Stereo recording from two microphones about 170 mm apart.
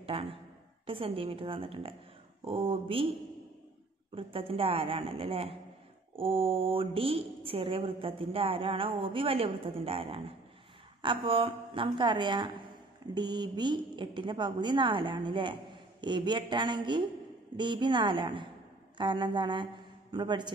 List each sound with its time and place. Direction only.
0.0 s a woman's voice: 35° right (ahead or behind)
4.1 s a woman's voice: 30° right (ahead or behind)